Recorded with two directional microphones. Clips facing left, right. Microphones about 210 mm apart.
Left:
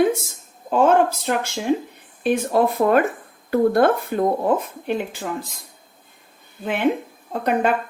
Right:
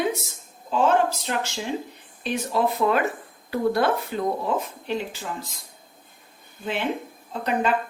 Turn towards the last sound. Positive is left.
turn(degrees=55)  # may be behind; listen again after turning